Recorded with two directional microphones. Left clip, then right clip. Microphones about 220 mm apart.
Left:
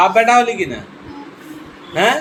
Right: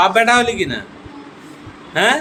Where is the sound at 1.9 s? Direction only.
15° right (ahead or behind).